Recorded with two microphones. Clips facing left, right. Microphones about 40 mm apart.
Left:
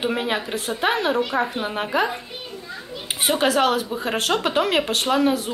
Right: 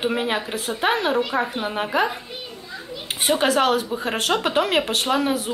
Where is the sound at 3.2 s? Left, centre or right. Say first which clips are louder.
Even; centre.